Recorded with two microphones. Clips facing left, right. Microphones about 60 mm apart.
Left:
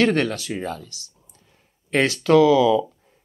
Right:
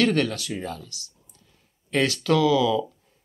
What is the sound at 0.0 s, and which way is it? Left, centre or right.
Speech, left.